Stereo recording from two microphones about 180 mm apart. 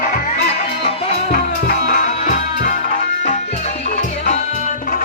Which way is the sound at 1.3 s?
55° left (ahead or behind).